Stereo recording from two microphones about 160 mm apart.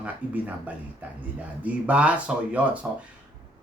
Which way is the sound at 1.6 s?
10° right (ahead or behind).